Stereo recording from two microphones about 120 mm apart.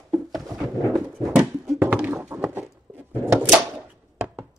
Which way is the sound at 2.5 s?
15° right (ahead or behind).